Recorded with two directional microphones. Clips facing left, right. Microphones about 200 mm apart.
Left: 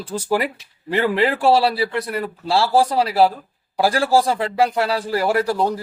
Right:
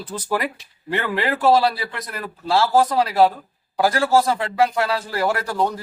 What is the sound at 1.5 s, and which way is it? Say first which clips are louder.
A man's voice: right 1 dB; 30° left (ahead or behind).